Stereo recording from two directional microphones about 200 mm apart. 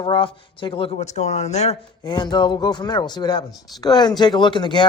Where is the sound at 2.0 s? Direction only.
20° left (ahead or behind).